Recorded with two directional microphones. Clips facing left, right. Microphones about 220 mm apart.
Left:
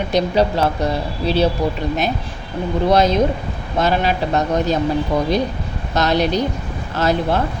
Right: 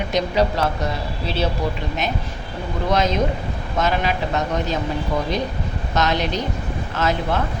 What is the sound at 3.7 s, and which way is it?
Speech, 35° left (ahead or behind).